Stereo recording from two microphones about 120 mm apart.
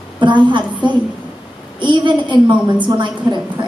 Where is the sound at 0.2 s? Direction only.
40° right (ahead or behind).